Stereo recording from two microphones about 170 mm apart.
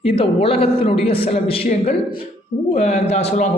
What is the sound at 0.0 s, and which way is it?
A man's voice, 35° left (ahead or behind).